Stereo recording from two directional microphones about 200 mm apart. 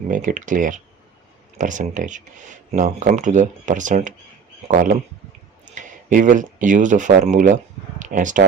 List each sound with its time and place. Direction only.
0.1 s speech: 40° right (ahead or behind)